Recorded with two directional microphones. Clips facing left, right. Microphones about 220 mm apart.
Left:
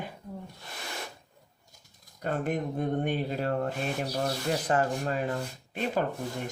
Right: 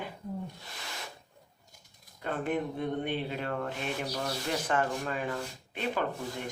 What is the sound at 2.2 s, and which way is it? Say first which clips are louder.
Speech: left 2 dB; 45° left (ahead or behind).